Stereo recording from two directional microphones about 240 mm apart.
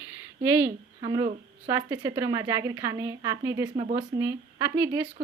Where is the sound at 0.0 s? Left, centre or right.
Centre.